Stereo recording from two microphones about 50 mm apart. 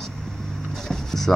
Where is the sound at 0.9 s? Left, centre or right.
Centre.